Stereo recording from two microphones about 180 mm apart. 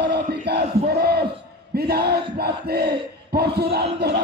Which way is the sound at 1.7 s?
60° right (ahead or behind).